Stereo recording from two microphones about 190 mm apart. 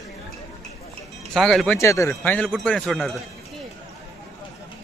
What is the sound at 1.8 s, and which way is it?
Speech, 15° left (ahead or behind).